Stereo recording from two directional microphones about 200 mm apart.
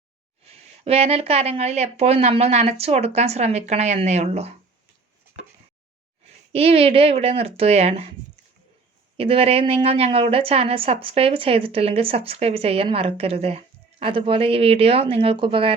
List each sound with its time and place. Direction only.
0.4 s speech: 30° right (ahead or behind)
6.5 s a woman's voice: 30° right (ahead or behind)
9.1 s a woman's voice: 30° right (ahead or behind)